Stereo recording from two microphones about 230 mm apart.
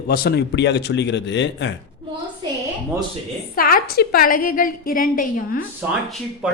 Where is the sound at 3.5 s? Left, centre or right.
Left.